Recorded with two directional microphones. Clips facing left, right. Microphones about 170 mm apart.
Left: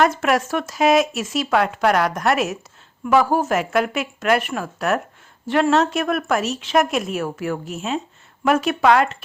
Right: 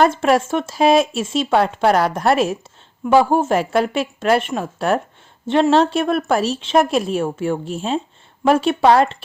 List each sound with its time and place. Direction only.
0.0 s a woman's voice: 30° right (ahead or behind)